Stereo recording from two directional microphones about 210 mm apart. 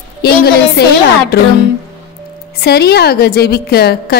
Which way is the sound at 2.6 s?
50° left (ahead or behind).